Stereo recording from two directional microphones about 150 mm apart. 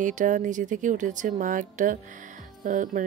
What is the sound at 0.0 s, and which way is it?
Speech, 60° right (ahead or behind).